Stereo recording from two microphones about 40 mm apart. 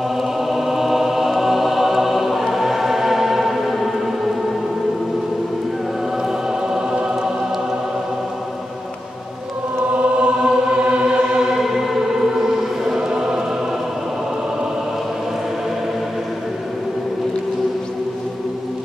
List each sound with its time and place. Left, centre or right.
0.2 s music: centre
2.4 s choir: centre
6.2 s choir: centre
9.9 s choir: right
11.3 s music: centre
11.6 s choir: centre